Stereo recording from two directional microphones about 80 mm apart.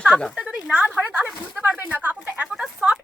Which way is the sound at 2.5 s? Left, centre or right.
Centre.